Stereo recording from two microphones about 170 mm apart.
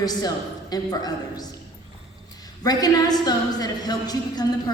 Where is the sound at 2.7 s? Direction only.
20° left (ahead or behind).